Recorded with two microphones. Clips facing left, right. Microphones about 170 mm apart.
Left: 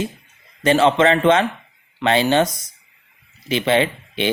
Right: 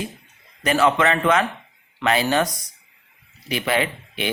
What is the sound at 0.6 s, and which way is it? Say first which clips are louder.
Speech: left 4 dB; 25° left (ahead or behind).